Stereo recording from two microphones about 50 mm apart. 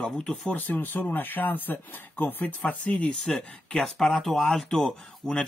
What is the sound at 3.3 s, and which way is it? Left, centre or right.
Speech, centre.